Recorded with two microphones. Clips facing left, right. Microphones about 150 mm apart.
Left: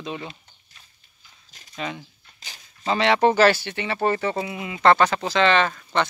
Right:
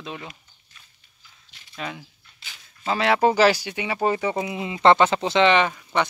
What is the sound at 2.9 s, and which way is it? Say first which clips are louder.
Speech: left 1 dB; 5° right (ahead or behind).